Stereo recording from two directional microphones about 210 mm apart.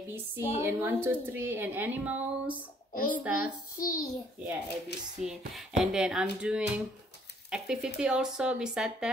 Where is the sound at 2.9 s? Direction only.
40° left (ahead or behind).